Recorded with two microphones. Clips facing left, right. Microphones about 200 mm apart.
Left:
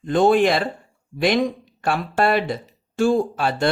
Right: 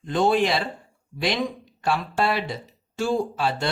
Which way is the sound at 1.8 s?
55° left (ahead or behind).